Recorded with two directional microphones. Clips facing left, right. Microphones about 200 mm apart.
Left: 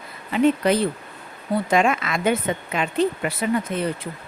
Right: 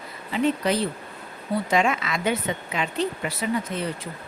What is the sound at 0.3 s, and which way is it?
A woman's voice, 55° left (ahead or behind).